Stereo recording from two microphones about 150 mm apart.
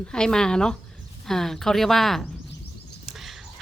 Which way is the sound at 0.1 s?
5° left (ahead or behind).